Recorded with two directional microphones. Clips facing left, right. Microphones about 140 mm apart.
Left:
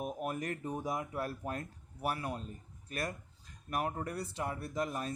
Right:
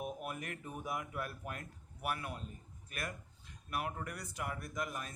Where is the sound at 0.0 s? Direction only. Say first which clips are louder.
Left 5 dB; 40° left (ahead or behind).